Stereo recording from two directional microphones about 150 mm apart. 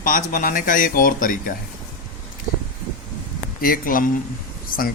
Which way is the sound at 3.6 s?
70° left (ahead or behind).